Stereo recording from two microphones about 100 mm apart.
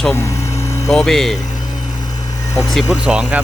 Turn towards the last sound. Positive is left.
turn(degrees=-15)  # may be behind; listen again after turning